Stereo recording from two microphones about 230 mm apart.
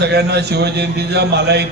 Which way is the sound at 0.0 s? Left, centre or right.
Right.